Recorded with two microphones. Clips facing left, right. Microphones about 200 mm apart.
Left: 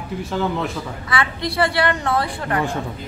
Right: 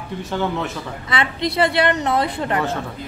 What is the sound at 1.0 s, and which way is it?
A woman's voice, 20° right (ahead or behind).